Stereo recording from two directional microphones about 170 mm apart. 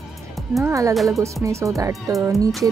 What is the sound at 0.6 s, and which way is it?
Speech, 20° right (ahead or behind).